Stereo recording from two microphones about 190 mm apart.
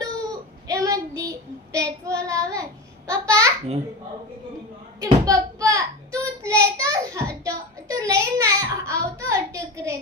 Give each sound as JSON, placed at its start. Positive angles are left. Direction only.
{"t": 0.7, "sound": "child singing", "side_deg": -20}
{"t": 3.1, "sound": "babbling", "side_deg": -15}
{"t": 4.9, "sound": "a sound", "side_deg": -20}
{"t": 7.4, "sound": "child singing", "side_deg": -15}